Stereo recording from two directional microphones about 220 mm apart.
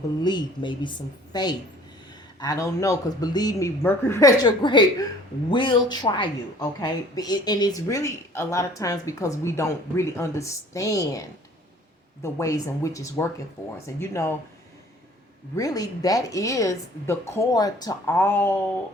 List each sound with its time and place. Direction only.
0.2 s a woman's voice: 20° left (ahead or behind)
15.5 s speech: 15° left (ahead or behind)